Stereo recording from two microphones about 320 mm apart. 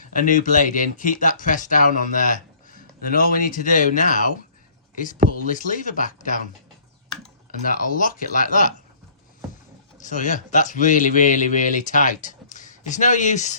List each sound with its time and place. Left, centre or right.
0.0 s speech: left
5.5 s speech: left
7.6 s speech: left
10.0 s speech: left